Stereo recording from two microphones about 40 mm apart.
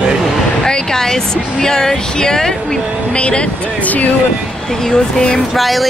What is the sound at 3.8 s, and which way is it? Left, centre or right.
Speech, left.